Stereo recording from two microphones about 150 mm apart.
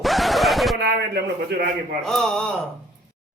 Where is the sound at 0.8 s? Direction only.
90° right.